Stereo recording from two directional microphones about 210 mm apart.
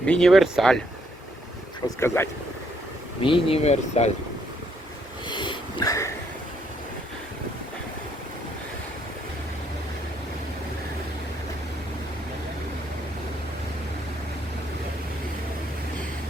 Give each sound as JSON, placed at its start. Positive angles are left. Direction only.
{"t": 0.0, "sound": "speech", "side_deg": 5}
{"t": 2.0, "sound": "speech", "side_deg": 10}
{"t": 3.2, "sound": "speech", "side_deg": 25}
{"t": 5.3, "sound": "sniff", "side_deg": 20}